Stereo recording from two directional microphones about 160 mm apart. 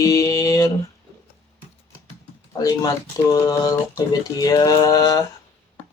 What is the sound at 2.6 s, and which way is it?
Speech, 20° left (ahead or behind).